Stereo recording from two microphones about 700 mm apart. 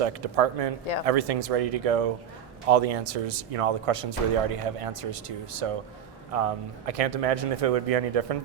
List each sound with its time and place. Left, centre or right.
0.0 s speech: right